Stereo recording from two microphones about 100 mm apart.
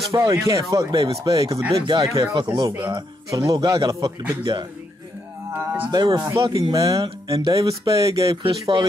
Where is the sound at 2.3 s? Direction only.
50° right (ahead or behind).